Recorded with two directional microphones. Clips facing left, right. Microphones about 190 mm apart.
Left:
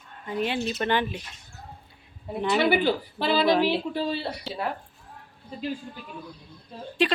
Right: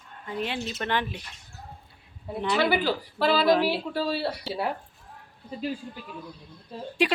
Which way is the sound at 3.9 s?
20° left (ahead or behind).